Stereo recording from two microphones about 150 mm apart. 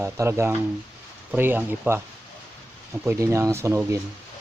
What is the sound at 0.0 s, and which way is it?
Speech, 20° right (ahead or behind).